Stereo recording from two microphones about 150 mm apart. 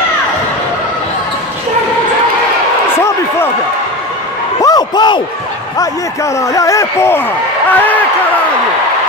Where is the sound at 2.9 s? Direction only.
15° left (ahead or behind).